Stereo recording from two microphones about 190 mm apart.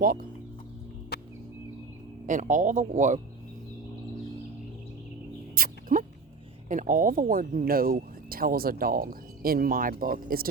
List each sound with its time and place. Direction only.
0.0 s speech: 50° right (ahead or behind)
1.1 s a sound: 55° left (ahead or behind)
2.2 s speech: 40° right (ahead or behind)
5.5 s dog: 45° right (ahead or behind)
6.7 s speech: 45° right (ahead or behind)